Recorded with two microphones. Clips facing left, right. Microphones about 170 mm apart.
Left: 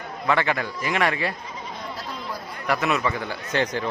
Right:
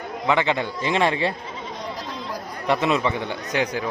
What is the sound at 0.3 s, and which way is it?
Speech, 20° right (ahead or behind).